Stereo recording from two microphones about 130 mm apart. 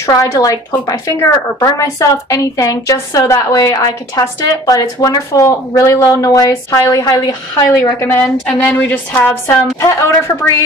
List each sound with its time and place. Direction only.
0.0 s a woman's voice: 25° left (ahead or behind)